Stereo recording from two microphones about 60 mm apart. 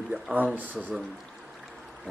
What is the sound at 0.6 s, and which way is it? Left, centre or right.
Speech, right.